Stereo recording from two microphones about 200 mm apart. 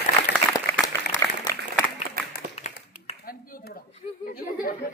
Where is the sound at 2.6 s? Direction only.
30° left (ahead or behind).